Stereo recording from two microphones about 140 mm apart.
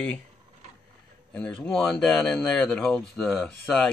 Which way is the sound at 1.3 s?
5° left (ahead or behind).